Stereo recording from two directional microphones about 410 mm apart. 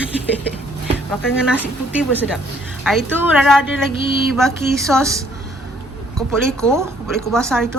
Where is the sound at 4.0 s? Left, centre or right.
Right.